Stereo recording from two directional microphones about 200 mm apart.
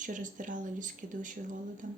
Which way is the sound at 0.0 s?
40° right (ahead or behind).